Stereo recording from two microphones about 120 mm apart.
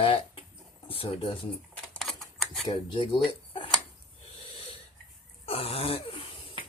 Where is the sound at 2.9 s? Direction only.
45° left (ahead or behind).